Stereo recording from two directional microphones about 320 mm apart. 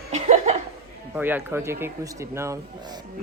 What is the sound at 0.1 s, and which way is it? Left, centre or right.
Laughter, right.